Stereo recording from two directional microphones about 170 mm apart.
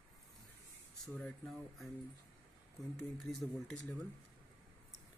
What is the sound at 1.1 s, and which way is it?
Speech, centre (ahead or behind).